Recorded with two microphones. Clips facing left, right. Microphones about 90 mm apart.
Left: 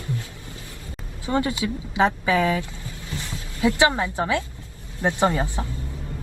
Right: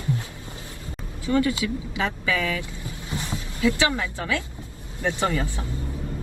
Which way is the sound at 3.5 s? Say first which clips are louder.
Left 3 dB; 25° left (ahead or behind).